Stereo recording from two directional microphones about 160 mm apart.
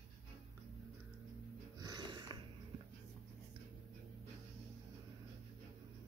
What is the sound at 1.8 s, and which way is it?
Music, 25° right (ahead or behind).